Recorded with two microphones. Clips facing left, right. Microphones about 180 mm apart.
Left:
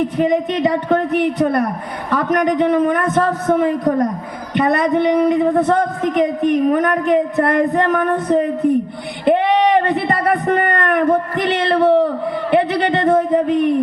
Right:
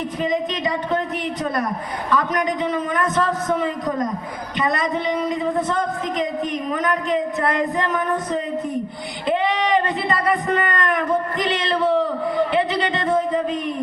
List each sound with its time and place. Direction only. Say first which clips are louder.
0.0 s a woman's voice: left 6 dB; 60° left (ahead or behind)